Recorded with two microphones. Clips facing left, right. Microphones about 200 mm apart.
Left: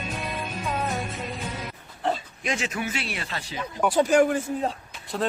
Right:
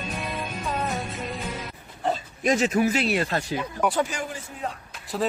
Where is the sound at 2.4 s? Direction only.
40° right (ahead or behind).